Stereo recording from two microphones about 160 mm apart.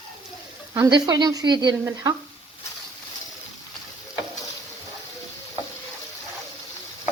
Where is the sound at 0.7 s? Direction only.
25° right (ahead or behind).